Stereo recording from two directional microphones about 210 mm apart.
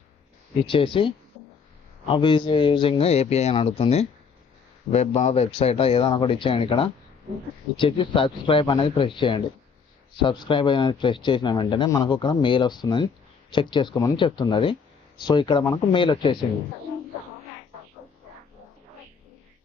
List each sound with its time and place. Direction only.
0.7 s speech: 25° left (ahead or behind)